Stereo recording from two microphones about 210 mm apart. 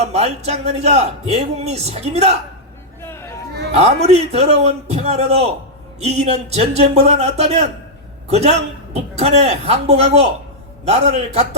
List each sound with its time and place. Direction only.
0.0 s a man's voice: 30° right (ahead or behind)
3.0 s a sound: 10° left (ahead or behind)
3.8 s a man's voice: 30° right (ahead or behind)